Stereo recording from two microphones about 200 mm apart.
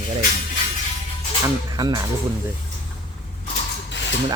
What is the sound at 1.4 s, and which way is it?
Speech, 20° right (ahead or behind).